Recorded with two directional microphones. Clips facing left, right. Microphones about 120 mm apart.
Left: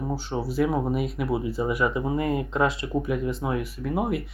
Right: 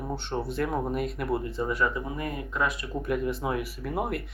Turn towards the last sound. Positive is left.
turn(degrees=0)  # may be behind; listen again after turning